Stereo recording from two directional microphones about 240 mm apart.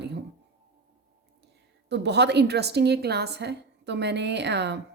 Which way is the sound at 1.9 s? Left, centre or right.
Right.